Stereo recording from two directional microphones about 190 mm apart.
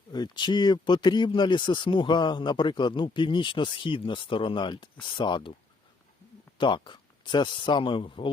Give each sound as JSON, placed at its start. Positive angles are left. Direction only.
{"t": 0.1, "sound": "speech", "side_deg": 25}
{"t": 6.6, "sound": "speech", "side_deg": 25}